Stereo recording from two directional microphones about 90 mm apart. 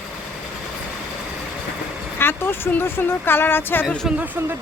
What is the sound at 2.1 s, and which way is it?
Speech, 25° left (ahead or behind).